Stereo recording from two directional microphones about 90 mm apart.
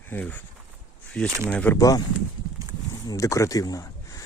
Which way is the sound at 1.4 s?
15° left (ahead or behind).